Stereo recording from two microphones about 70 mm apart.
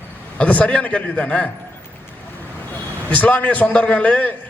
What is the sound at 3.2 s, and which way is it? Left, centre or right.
A man's voice, left.